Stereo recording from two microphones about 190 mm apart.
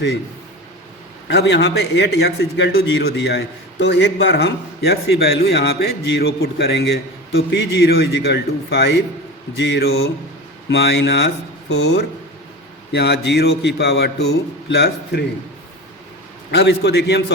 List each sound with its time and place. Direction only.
1.3 s a man's voice: 60° left (ahead or behind)
16.5 s a man's voice: 60° left (ahead or behind)